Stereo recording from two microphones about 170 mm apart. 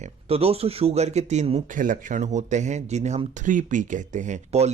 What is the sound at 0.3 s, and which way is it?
Speech, 35° right (ahead or behind).